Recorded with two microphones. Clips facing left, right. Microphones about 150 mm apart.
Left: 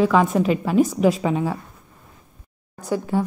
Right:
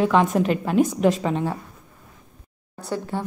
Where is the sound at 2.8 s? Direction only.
10° left (ahead or behind).